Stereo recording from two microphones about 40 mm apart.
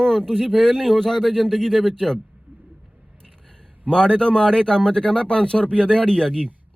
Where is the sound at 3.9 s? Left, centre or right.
Left.